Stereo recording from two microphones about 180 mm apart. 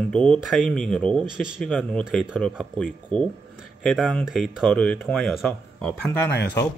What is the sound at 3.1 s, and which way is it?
Speech, 30° right (ahead or behind).